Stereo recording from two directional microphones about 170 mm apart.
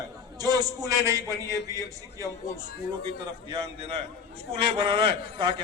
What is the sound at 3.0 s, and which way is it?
A man's voice, 35° right (ahead or behind).